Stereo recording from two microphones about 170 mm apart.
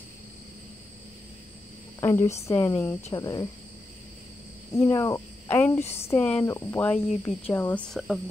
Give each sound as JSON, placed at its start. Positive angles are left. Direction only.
{"t": 2.0, "sound": "speech", "side_deg": 15}
{"t": 4.7, "sound": "speech", "side_deg": 15}